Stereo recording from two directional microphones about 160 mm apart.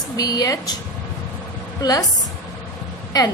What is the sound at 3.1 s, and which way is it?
Speech, 25° left (ahead or behind).